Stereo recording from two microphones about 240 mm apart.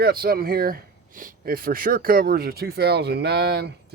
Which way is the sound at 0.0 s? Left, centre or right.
Right.